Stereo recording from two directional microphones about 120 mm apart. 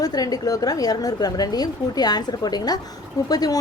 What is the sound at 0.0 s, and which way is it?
A woman's voice, 30° left (ahead or behind).